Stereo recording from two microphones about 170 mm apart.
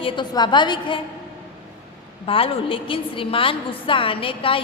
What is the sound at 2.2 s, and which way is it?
A woman's voice, 35° left (ahead or behind).